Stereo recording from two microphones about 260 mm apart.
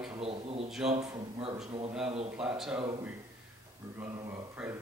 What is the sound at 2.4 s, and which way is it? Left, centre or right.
Speech, centre.